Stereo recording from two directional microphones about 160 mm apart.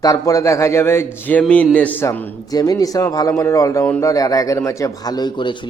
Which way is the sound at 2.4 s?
25° left (ahead or behind).